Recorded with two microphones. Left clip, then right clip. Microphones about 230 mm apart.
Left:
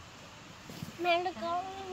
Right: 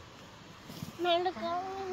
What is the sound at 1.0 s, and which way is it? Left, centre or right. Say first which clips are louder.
Speech: even; left.